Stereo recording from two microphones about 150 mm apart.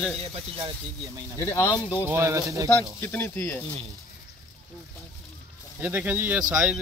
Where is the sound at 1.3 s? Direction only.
15° left (ahead or behind).